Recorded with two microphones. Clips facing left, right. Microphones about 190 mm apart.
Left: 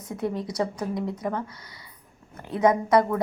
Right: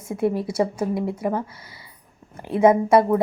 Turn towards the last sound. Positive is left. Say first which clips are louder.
# right 5 dB
turn(degrees=-25)  # may be behind; listen again after turning